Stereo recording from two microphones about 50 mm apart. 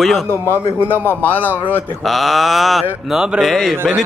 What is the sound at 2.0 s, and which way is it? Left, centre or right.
Speech, centre.